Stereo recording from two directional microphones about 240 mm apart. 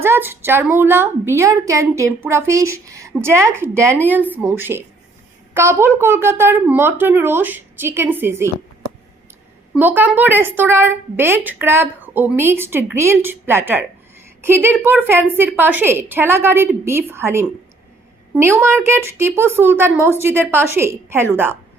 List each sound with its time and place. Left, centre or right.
0.0 s a woman's voice: centre
9.7 s a woman's voice: centre